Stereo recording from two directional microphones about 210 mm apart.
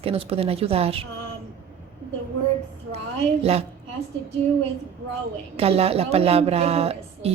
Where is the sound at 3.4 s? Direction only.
30° right (ahead or behind).